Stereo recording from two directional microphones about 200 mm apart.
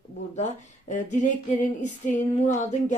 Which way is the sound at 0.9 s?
40° left (ahead or behind).